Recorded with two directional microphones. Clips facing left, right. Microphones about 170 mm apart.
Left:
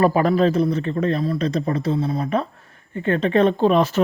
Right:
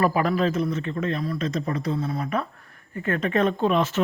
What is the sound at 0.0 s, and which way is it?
Speech, 35° left (ahead or behind).